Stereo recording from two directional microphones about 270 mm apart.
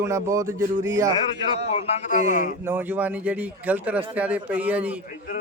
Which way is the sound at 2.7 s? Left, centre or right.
Centre.